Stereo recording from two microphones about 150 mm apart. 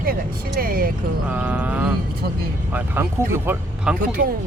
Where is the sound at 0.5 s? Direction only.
75° right (ahead or behind).